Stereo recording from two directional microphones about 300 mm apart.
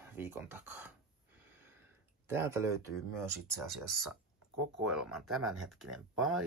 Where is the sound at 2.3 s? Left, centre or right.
Centre.